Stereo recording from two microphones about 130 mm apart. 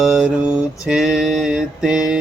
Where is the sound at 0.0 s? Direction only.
5° right (ahead or behind).